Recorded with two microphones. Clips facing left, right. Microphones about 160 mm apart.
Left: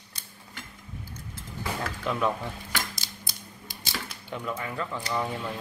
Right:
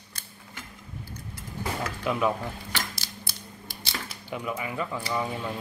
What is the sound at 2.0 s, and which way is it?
Speech, 5° right (ahead or behind).